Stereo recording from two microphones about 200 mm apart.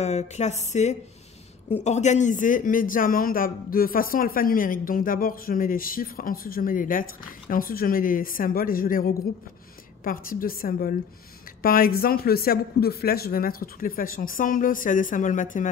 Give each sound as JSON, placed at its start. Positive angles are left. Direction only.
{"t": 0.0, "sound": "speech", "side_deg": 35}